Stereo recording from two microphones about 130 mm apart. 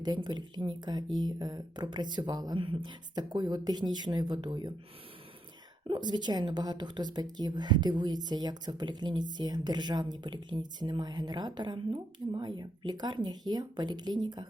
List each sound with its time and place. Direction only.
0.0 s speech: 35° right (ahead or behind)
5.9 s speech: 35° right (ahead or behind)